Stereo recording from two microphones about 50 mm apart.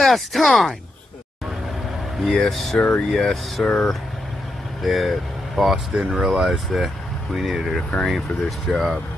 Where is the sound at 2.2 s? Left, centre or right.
Centre.